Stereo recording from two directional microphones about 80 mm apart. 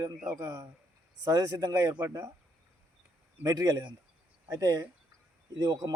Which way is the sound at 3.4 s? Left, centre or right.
Right.